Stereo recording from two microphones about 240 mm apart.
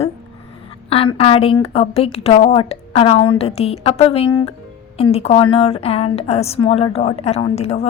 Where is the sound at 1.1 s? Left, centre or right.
Left.